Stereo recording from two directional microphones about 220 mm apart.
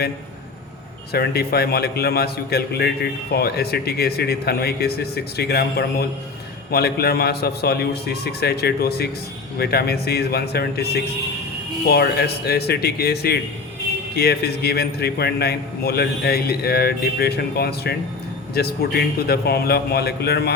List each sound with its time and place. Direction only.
1.1 s a man's voice: 45° left (ahead or behind)